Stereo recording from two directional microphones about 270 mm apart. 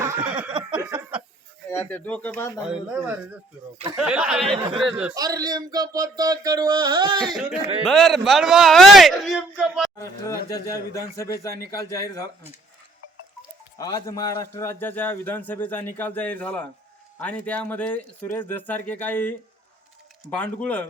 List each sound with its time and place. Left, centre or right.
0.0 s a sound: centre
1.8 s speech: centre
4.5 s speech: centre
4.9 s speech: centre
7.3 s speech: centre
10.0 s a man's voice: centre
13.7 s a man's voice: centre